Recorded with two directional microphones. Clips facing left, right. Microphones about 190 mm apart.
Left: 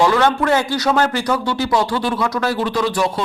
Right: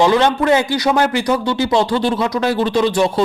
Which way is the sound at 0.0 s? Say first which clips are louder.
Right 2 dB; 20° right (ahead or behind).